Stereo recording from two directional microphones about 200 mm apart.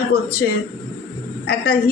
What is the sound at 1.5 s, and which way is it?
Speech, 50° left (ahead or behind).